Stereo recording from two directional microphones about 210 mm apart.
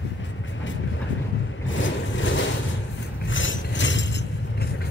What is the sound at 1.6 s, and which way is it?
Vehicle, 65° left (ahead or behind).